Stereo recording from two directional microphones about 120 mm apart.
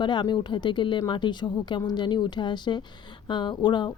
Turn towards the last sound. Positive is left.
turn(degrees=40)  # may be behind; listen again after turning